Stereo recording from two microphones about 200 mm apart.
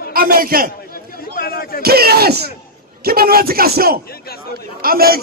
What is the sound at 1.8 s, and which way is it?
A man's voice, 50° right (ahead or behind).